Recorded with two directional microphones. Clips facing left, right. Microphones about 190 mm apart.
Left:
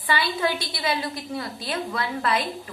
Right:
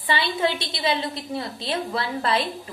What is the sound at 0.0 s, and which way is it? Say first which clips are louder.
A woman's voice: right 1 dB; 25° right (ahead or behind).